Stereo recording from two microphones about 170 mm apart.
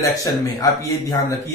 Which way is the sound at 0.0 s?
20° left (ahead or behind).